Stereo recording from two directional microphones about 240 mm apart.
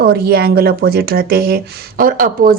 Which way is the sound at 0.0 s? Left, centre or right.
Right.